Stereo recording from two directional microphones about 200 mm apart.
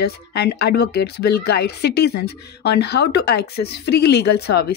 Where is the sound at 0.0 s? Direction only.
55° left (ahead or behind).